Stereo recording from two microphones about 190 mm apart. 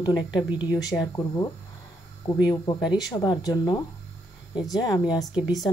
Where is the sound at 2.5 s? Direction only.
20° left (ahead or behind).